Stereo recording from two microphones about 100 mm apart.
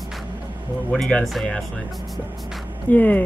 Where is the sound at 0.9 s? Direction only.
5° left (ahead or behind).